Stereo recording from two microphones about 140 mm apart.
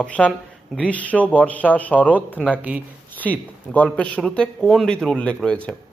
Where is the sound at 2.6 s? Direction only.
10° right (ahead or behind).